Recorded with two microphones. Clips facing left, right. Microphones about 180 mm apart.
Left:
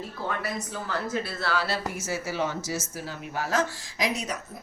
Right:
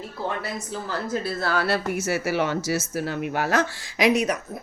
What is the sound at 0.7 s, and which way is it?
A woman's voice, 35° right (ahead or behind).